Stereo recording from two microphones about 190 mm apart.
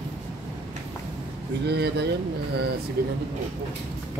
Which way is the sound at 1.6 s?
60° right (ahead or behind).